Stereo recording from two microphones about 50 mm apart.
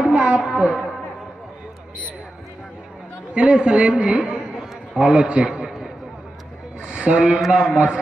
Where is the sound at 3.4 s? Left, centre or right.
Centre.